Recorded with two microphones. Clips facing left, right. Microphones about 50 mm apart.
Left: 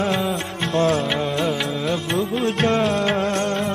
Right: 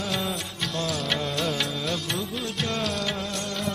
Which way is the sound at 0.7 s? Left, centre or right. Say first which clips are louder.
Left 11 dB; left.